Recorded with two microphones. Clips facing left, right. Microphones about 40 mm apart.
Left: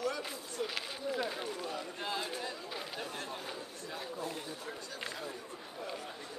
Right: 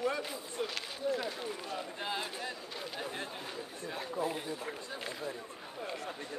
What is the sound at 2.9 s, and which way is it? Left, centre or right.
Chatter, centre.